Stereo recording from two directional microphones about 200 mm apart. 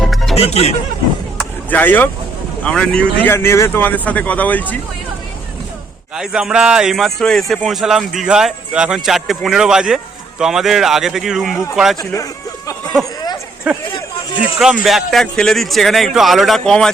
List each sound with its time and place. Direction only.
0.0 s music: centre (ahead or behind)
0.3 s speech: 30° left (ahead or behind)
1.4 s vehicle: 10° left (ahead or behind)
2.6 s speech: 5° left (ahead or behind)
6.1 s speech: 5° right (ahead or behind)
11.9 s a sound: 15° left (ahead or behind)
13.9 s a sound: 25° left (ahead or behind)
14.8 s speech: centre (ahead or behind)